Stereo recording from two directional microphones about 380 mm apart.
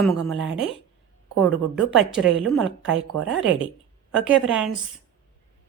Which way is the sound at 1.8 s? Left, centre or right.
Centre.